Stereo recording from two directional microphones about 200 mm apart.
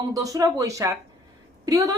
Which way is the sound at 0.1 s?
15° right (ahead or behind).